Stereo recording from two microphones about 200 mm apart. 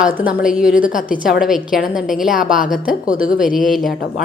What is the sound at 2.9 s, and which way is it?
Speech, 45° left (ahead or behind).